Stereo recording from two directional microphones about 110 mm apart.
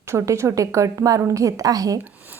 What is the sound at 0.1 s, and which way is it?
A woman's voice, 25° right (ahead or behind).